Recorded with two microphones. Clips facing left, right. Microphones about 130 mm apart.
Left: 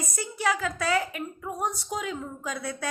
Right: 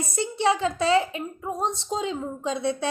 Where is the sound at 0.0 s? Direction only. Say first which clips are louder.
Right 5 dB; 25° right (ahead or behind).